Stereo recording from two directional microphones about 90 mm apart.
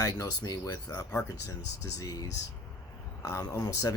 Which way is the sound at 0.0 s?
40° left (ahead or behind).